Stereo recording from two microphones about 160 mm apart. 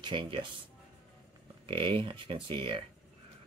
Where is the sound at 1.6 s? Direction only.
35° right (ahead or behind).